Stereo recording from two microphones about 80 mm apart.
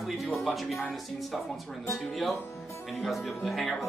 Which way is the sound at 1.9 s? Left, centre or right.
Centre.